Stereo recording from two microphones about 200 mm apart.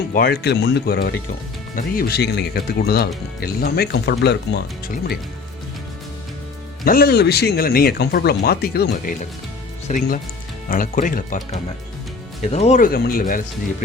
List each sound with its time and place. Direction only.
0.1 s speech: 50° left (ahead or behind)
6.8 s speech: 45° left (ahead or behind)
9.9 s speech: 40° left (ahead or behind)